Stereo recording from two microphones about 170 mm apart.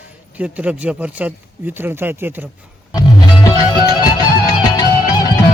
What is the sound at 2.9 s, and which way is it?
Music, 25° left (ahead or behind).